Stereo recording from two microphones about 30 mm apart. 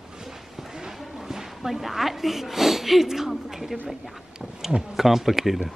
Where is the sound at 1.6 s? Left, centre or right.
Centre.